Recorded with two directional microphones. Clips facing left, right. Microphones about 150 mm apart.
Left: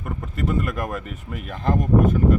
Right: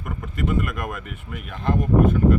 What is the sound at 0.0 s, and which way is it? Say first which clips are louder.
Speech: left 1 dB; 35° left (ahead or behind).